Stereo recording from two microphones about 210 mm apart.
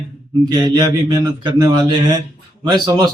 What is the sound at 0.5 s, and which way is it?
A man's voice, 20° right (ahead or behind).